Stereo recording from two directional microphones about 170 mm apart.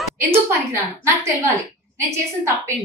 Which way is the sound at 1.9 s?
15° right (ahead or behind).